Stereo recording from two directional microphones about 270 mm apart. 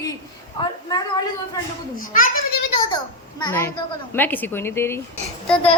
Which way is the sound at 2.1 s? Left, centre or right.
Left.